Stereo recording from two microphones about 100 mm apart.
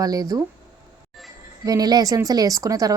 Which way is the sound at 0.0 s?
40° right (ahead or behind).